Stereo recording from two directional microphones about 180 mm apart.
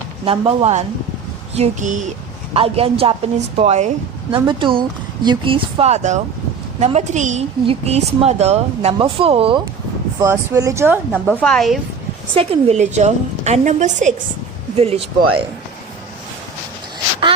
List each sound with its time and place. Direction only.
0.3 s speech: 35° right (ahead or behind)
2.5 s speech: 35° right (ahead or behind)
4.4 s speech: 25° right (ahead or behind)
10.2 s speech: 20° right (ahead or behind)
11.1 s a woman's voice: 5° left (ahead or behind)
12.3 s speech: 35° right (ahead or behind)